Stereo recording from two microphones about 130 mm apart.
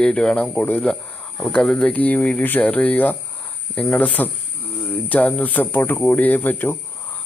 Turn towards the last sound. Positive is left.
turn(degrees=15)  # may be behind; listen again after turning